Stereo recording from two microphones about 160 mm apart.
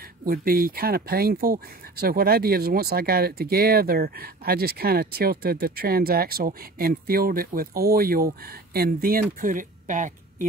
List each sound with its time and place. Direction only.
0.2 s speech: 65° right (ahead or behind)